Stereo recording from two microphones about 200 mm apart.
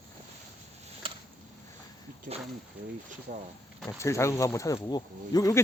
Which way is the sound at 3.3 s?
45° right (ahead or behind).